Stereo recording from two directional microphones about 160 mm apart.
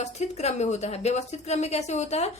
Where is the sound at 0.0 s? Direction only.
45° left (ahead or behind).